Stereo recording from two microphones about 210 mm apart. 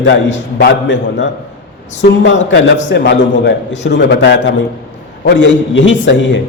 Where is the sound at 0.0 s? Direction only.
65° left (ahead or behind).